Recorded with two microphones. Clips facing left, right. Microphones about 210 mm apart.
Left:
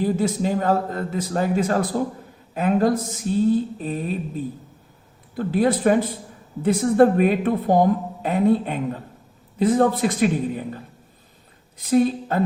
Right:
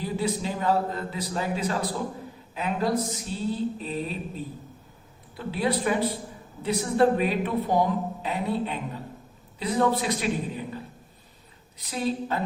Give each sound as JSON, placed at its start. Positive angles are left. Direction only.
{"t": 0.0, "sound": "a woman's voice", "side_deg": 50}
{"t": 5.4, "sound": "a woman's voice", "side_deg": 45}
{"t": 11.8, "sound": "a woman's voice", "side_deg": 50}